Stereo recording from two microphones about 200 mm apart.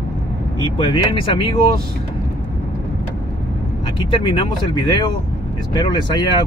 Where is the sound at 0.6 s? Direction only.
25° left (ahead or behind).